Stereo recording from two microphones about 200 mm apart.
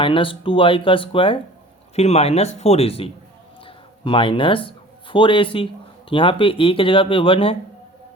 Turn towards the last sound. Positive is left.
turn(degrees=25)  # may be behind; listen again after turning